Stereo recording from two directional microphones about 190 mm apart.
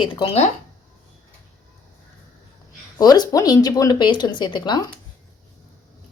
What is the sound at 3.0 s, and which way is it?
Speech, 20° left (ahead or behind).